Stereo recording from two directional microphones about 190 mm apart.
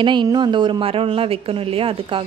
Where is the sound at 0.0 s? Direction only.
25° right (ahead or behind).